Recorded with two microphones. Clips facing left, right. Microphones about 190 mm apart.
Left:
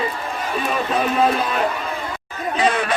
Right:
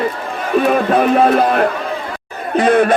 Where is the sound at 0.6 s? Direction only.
60° right (ahead or behind).